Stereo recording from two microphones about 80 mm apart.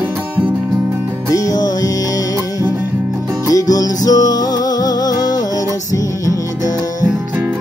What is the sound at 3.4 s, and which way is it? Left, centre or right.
Music, left.